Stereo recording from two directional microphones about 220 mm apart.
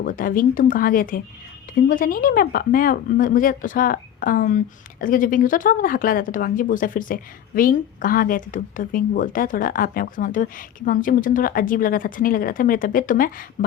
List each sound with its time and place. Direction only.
0.0 s speech: 40° left (ahead or behind)